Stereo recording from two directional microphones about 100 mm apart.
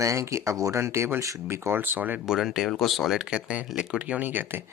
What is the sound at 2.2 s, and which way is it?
Speech, 5° right (ahead or behind).